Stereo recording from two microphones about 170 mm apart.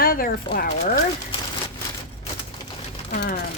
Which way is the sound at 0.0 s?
60° left (ahead or behind).